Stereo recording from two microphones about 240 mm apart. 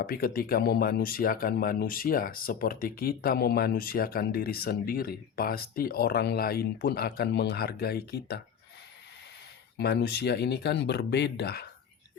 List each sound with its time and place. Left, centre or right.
0.0 s speech: left
9.7 s speech: left